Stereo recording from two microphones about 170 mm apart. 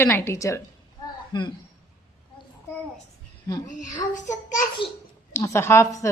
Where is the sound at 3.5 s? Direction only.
20° left (ahead or behind).